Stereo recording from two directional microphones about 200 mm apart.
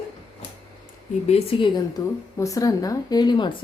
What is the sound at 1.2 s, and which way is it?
Speech, 30° left (ahead or behind).